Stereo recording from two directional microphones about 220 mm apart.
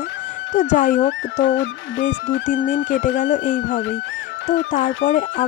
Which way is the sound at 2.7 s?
35° left (ahead or behind).